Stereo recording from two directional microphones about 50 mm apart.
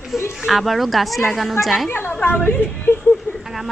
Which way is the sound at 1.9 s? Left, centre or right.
Left.